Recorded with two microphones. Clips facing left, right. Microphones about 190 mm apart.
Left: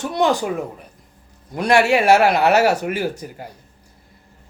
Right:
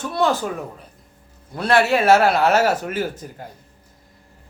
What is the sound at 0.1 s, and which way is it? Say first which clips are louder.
Speech: left 1 dB; 15° left (ahead or behind).